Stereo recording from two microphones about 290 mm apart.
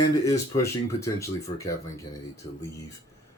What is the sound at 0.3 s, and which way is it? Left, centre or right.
Speech, centre.